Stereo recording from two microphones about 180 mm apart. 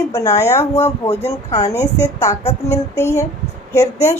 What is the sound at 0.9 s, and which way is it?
Speech, 35° left (ahead or behind).